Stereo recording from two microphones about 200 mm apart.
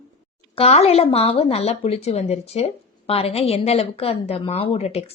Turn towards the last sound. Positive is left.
turn(degrees=30)  # may be behind; listen again after turning